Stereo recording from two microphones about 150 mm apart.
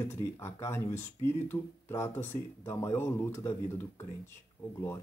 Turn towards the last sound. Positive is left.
turn(degrees=10)  # may be behind; listen again after turning